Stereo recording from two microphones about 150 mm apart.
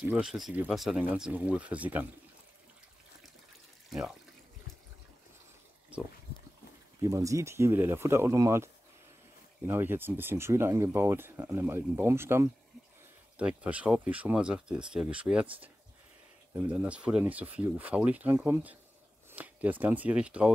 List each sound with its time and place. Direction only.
0.1 s speech: 5° right (ahead or behind)
3.9 s speech: 5° right (ahead or behind)
7.0 s speech: 20° right (ahead or behind)
9.7 s speech: 15° right (ahead or behind)